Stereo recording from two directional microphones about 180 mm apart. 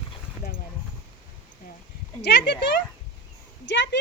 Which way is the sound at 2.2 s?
70° left (ahead or behind).